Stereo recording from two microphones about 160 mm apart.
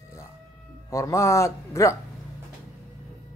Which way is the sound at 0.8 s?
20° left (ahead or behind).